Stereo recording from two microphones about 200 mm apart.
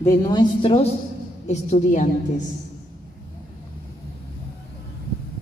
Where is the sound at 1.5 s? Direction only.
35° left (ahead or behind).